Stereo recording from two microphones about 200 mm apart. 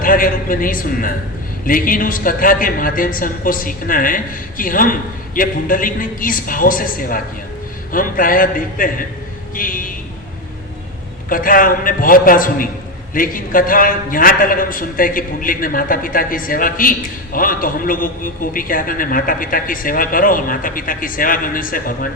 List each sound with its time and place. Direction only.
0.0 s a man's voice: 45° left (ahead or behind)
11.3 s a man's voice: 45° left (ahead or behind)